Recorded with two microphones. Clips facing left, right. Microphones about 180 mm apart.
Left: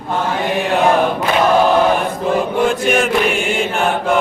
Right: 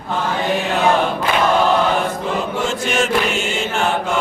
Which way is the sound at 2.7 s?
55° left (ahead or behind).